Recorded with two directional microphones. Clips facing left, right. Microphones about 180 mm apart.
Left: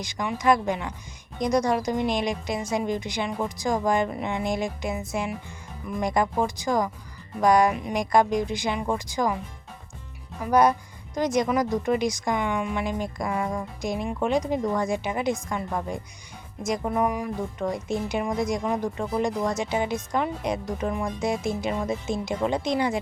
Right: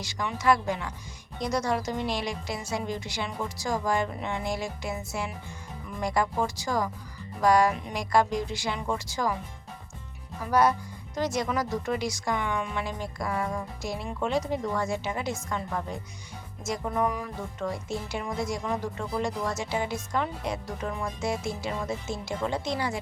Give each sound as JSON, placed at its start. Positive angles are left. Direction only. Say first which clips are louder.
{"t": 0.0, "sound": "speech", "louder": "left 3 dB", "side_deg": 15}
{"t": 10.5, "sound": "speech", "louder": "left 3 dB", "side_deg": 15}